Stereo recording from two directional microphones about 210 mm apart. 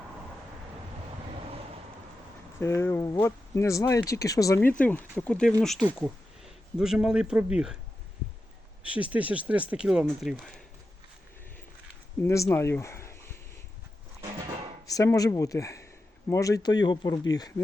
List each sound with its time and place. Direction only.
2.6 s speech: 10° left (ahead or behind); by 7.8 s 5° right (ahead or behind)
8.8 s speech: 5° right (ahead or behind)
12.2 s speech: 10° left (ahead or behind)
14.8 s speech: 15° left (ahead or behind)